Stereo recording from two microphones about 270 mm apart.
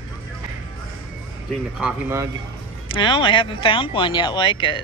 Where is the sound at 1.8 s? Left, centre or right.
Centre.